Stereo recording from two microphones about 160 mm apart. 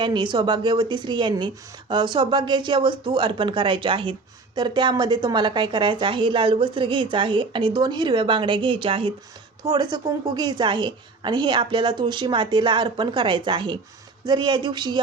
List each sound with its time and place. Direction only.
0.0 s a woman's voice: 30° right (ahead or behind)